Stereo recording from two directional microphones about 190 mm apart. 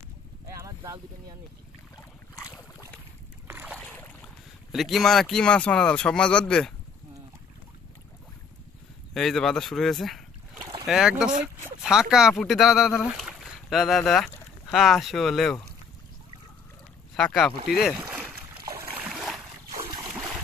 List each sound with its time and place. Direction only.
0.6 s boat: 15° right (ahead or behind)
3.4 s boat: 10° right (ahead or behind)
3.7 s boat: 5° left (ahead or behind)
4.7 s speech: centre (ahead or behind)
9.1 s speech: centre (ahead or behind)
17.1 s speech: 5° left (ahead or behind)
18.0 s splash: 10° right (ahead or behind)
19.8 s boat: 20° right (ahead or behind)